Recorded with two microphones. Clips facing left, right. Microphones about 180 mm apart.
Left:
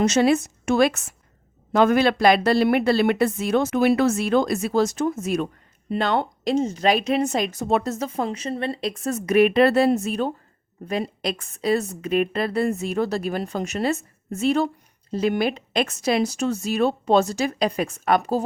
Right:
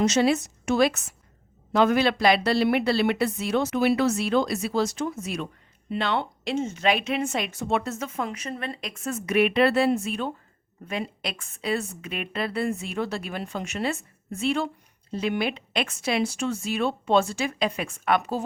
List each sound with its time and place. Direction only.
0.0 s a woman's voice: 50° left (ahead or behind)